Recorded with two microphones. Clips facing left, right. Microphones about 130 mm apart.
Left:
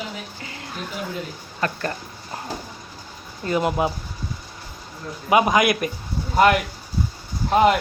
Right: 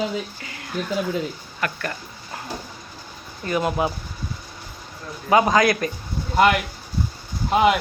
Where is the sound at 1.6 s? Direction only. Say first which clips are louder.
Left 2 dB; 30° left (ahead or behind).